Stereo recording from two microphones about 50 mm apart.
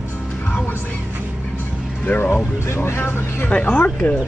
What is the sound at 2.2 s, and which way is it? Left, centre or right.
Speech, left.